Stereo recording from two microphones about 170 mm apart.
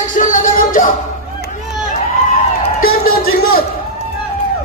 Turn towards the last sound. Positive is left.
turn(degrees=65)  # may be behind; listen again after turning